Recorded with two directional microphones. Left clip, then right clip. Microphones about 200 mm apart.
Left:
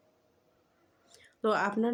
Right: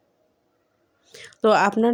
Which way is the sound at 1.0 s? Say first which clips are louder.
Right 11 dB; 40° right (ahead or behind).